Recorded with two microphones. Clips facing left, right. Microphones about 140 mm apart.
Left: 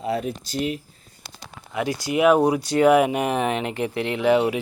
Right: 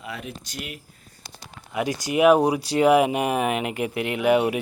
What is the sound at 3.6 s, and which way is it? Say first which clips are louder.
Speech: left 1 dB; 30° left (ahead or behind).